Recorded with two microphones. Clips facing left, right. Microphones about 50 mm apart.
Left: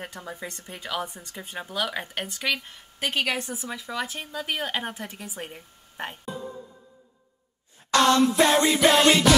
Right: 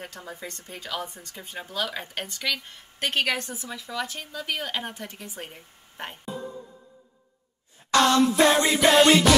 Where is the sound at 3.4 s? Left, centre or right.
Centre.